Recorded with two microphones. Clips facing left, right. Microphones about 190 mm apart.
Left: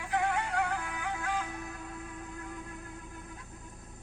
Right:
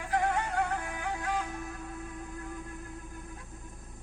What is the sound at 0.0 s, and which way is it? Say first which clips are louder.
Music: right 1 dB; 45° right (ahead or behind).